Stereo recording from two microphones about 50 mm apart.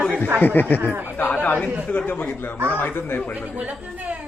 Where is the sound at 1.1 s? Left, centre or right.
Left.